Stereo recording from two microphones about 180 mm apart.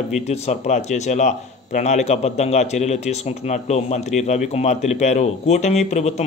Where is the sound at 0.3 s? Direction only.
40° left (ahead or behind).